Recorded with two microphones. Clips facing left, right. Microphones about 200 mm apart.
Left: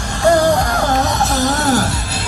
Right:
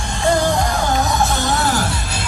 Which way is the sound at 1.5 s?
40° left (ahead or behind).